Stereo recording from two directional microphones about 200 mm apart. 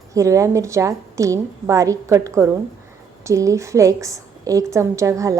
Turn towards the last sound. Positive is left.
turn(degrees=-15)  # may be behind; listen again after turning